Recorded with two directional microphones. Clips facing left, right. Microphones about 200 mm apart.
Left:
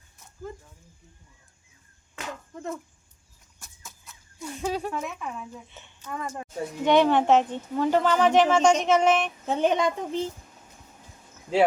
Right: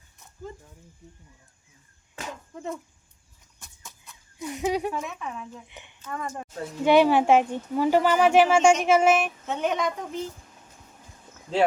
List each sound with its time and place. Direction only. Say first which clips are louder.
2.5 s speech: right 1 dB; centre (ahead or behind)
3.6 s a sound: even; centre (ahead or behind)
4.1 s a sound: right 3 dB; 20° right (ahead or behind)
4.9 s speech: even; 5° right (ahead or behind)
5.6 s speech: right 2 dB; 15° right (ahead or behind)
6.0 s a woman's voice: even; 5° left (ahead or behind)
9.5 s speech: left 5 dB; 30° left (ahead or behind)